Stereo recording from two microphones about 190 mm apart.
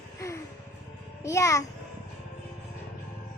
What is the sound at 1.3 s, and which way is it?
Speech, 15° left (ahead or behind).